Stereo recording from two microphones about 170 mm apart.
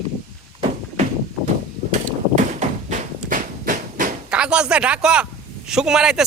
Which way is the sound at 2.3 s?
45° right (ahead or behind).